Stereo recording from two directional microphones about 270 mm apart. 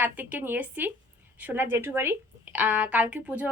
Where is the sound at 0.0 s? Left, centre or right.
Centre.